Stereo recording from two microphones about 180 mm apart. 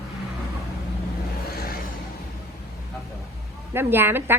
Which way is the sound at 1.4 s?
55° left (ahead or behind).